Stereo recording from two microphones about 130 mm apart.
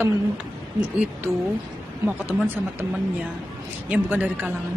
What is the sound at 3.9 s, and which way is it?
Speech, 10° right (ahead or behind).